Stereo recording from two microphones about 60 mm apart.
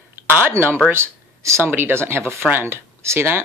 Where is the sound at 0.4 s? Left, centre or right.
Right.